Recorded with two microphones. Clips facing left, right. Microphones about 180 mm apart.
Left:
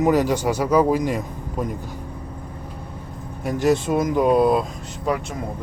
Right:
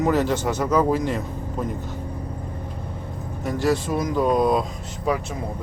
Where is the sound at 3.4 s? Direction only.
20° left (ahead or behind).